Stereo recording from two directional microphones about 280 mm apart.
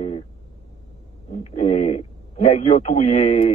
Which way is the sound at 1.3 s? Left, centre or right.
Left.